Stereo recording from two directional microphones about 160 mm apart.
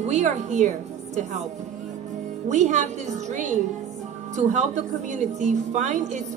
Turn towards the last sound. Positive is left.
turn(degrees=-50)  # may be behind; listen again after turning